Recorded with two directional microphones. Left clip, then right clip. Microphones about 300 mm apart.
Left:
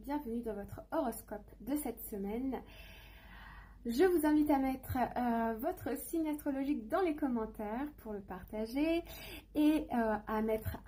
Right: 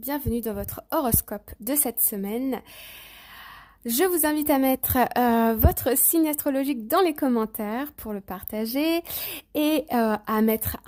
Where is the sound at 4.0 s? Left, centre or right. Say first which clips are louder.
Right 6 dB; right.